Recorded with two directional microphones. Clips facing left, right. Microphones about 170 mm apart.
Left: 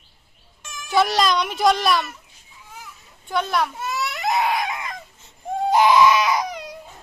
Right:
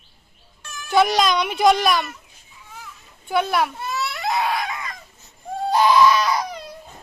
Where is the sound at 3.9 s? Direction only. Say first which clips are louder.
Left 1 dB; 15° left (ahead or behind).